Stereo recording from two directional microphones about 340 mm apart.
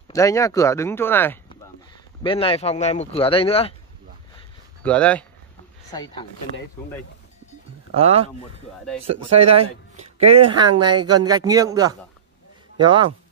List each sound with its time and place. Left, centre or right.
0.1 s speech: centre
4.8 s speech: centre
7.9 s speech: centre
10.2 s speech: centre
10.7 s speech: right
11.1 s a man's voice: centre